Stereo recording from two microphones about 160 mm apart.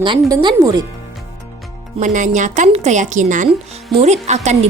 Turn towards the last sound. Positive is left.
turn(degrees=-45)  # may be behind; listen again after turning